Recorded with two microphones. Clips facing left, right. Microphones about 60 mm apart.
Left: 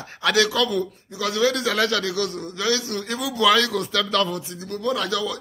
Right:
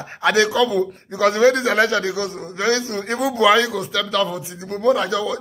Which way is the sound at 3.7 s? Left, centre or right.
Centre.